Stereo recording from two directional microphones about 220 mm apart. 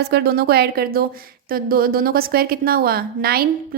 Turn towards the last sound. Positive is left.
turn(degrees=-45)  # may be behind; listen again after turning